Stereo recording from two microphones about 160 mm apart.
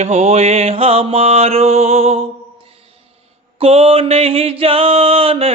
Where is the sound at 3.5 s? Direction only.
35° right (ahead or behind).